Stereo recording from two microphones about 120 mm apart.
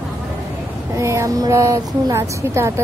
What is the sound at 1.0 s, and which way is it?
A woman's voice, 25° right (ahead or behind).